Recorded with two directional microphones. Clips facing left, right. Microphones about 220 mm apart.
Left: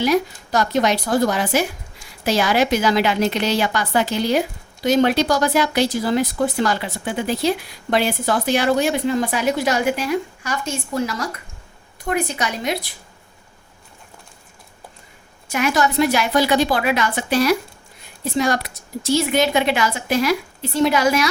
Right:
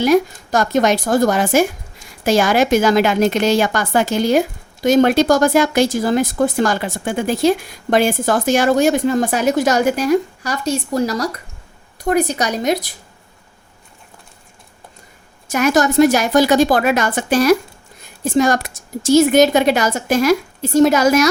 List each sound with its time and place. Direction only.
0.0 s a woman's voice: 50° right (ahead or behind)
15.4 s a woman's voice: 45° right (ahead or behind)